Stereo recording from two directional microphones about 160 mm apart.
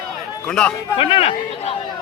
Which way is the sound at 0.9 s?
35° left (ahead or behind).